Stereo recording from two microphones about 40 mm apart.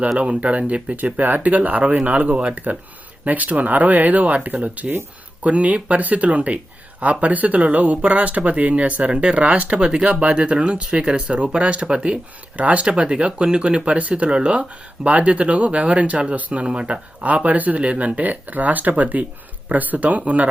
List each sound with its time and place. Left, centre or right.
0.2 s speech: right
0.9 s speech: right
16.5 s speech: right